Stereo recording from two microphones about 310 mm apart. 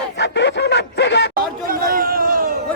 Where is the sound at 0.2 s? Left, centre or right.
Left.